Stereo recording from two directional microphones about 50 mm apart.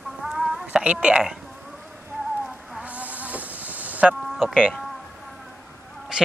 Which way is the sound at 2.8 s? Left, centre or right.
Right.